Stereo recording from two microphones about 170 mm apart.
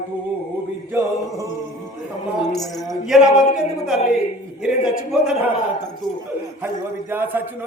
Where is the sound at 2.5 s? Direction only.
Centre (ahead or behind).